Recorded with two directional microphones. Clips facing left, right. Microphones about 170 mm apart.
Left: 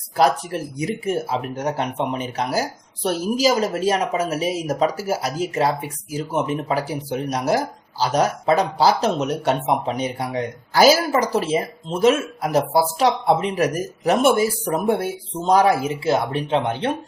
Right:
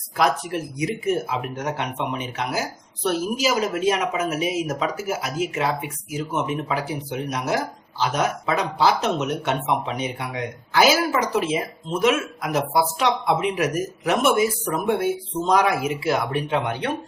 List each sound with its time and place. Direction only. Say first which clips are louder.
0.2 s speech: left 3 dB; 35° left (ahead or behind)